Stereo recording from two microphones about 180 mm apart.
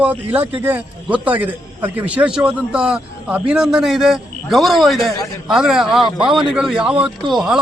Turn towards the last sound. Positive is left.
turn(degrees=-5)  # may be behind; listen again after turning